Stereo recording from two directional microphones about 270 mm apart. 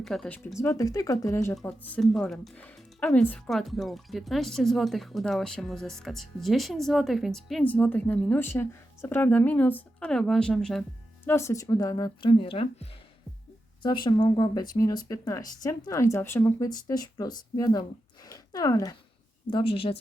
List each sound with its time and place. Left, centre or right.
0.0 s speech: centre; by 20.0 s left